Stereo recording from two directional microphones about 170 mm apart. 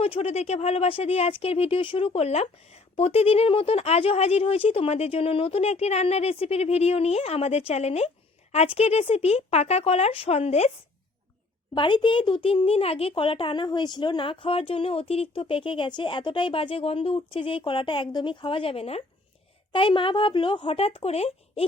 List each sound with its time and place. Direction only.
0.0 s speech: 35° left (ahead or behind)
11.7 s speech: 30° left (ahead or behind)